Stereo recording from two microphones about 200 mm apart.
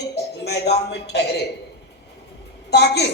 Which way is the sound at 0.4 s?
55° left (ahead or behind).